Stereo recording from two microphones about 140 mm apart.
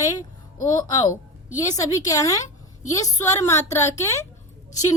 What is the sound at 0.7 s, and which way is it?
A woman's voice, 30° left (ahead or behind).